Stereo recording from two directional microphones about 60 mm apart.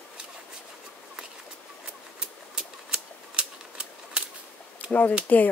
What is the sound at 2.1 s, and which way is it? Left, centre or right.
Typewriter, centre.